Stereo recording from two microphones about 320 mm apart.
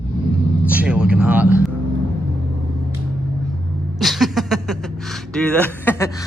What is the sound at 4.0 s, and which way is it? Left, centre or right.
Speech, centre.